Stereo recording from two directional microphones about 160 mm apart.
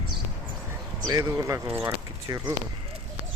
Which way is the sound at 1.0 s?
20° right (ahead or behind).